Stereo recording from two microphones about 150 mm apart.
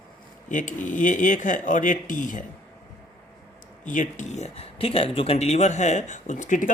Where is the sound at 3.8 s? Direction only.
55° left (ahead or behind).